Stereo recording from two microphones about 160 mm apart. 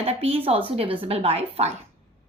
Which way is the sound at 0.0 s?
40° right (ahead or behind).